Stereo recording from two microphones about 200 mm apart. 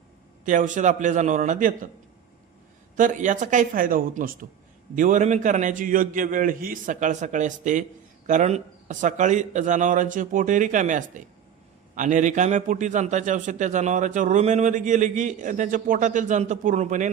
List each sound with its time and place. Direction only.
0.4 s a man's voice: 40° right (ahead or behind)
2.9 s a man's voice: 40° right (ahead or behind)